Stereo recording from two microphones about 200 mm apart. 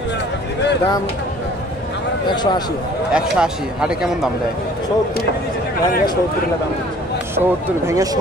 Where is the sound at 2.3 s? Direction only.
20° left (ahead or behind).